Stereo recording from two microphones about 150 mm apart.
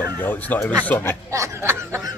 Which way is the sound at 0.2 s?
10° left (ahead or behind).